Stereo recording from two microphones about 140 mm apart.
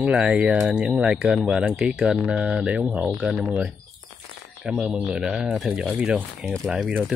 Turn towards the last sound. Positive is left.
turn(degrees=-5)  # may be behind; listen again after turning